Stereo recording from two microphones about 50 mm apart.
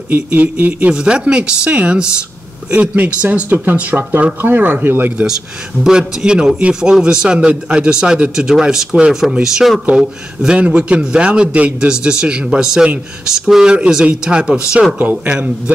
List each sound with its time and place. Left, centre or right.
0.1 s speech: right
0.9 s speech: centre
3.4 s speech: right
5.9 s a man's voice: centre
15.0 s speech: right